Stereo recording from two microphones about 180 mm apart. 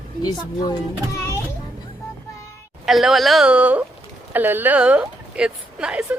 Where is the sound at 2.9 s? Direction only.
Centre (ahead or behind).